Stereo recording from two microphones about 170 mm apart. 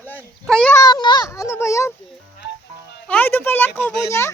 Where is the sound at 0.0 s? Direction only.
10° left (ahead or behind).